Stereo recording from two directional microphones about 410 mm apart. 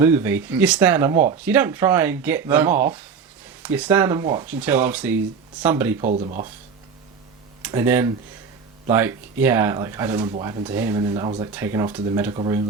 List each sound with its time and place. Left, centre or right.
0.0 s speech: centre
6.0 s speech: centre
7.6 s speech: centre